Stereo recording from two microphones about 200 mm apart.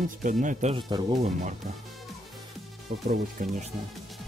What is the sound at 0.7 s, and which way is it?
Speech, 25° right (ahead or behind).